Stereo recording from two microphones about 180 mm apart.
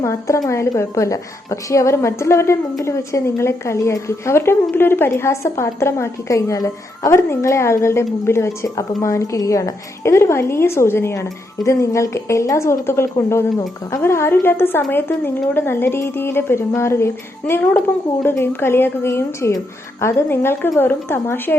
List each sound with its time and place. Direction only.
0.0 s a woman's voice: 15° left (ahead or behind)